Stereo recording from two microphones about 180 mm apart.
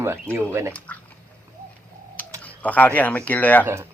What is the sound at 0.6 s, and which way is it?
Speech, 15° right (ahead or behind).